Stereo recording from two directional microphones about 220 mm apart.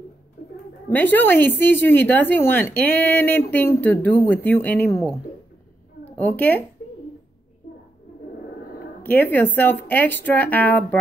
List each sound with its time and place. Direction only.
0.4 s bird: 40° left (ahead or behind)
0.8 s a woman's voice: 10° left (ahead or behind)
9.0 s a woman's voice: 10° left (ahead or behind)